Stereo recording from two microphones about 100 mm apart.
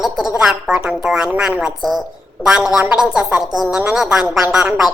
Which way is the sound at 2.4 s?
5° right (ahead or behind).